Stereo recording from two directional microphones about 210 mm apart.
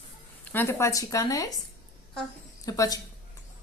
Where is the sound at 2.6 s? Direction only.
15° left (ahead or behind).